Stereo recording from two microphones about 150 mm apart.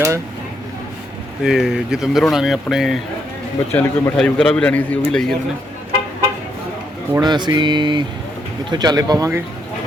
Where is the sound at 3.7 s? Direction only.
15° left (ahead or behind).